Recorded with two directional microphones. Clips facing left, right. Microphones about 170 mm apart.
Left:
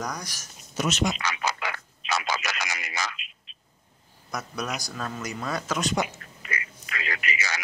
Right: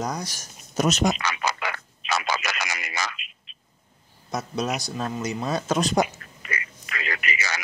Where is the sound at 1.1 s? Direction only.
60° right (ahead or behind).